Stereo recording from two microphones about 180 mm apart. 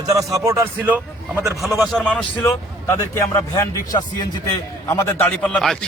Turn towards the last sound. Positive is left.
turn(degrees=5)  # may be behind; listen again after turning